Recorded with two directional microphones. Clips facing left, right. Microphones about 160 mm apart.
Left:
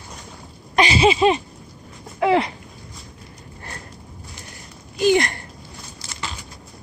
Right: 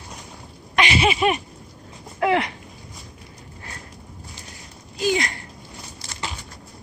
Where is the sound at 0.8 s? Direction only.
30° left (ahead or behind).